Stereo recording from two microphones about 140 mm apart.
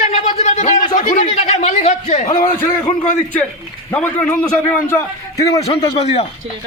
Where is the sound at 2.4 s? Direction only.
20° left (ahead or behind).